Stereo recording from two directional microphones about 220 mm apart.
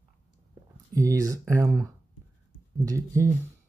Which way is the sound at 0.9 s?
15° right (ahead or behind).